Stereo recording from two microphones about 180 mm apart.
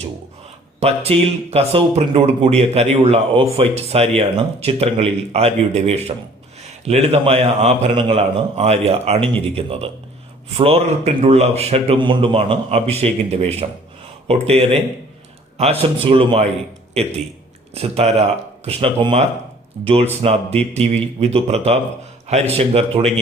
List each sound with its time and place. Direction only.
0.8 s a man's voice: 35° right (ahead or behind)